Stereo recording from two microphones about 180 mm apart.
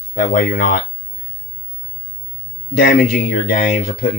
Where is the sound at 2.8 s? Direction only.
55° left (ahead or behind).